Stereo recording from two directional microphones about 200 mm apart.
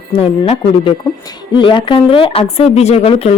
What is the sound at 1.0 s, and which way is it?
A woman's voice, 20° left (ahead or behind).